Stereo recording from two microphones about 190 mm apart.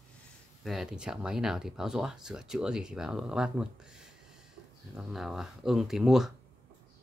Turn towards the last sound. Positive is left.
turn(degrees=0)  # may be behind; listen again after turning